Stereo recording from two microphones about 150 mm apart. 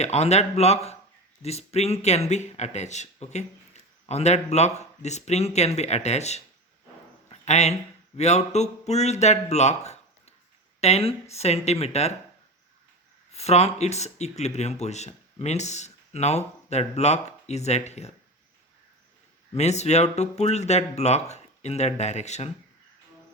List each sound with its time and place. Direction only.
0.0 s speech: 45° left (ahead or behind)
13.3 s speech: 45° left (ahead or behind)
19.5 s speech: 50° left (ahead or behind)